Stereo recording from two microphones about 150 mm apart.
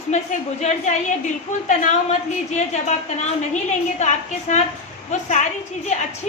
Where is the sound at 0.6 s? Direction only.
55° left (ahead or behind).